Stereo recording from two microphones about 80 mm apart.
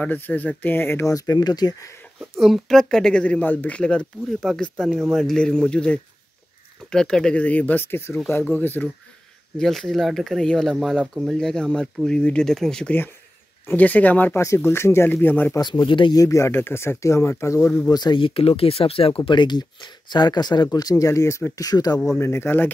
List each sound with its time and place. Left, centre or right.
0.0 s speech: centre
1.0 s speech: left
2.1 s speech: centre; by 8.8 s left
9.6 s speech: centre
13.7 s speech: centre
14.3 s speech: left
15.6 s speech: left
16.2 s speech: left
17.8 s speech: left
21.5 s speech: left
22.2 s speech: left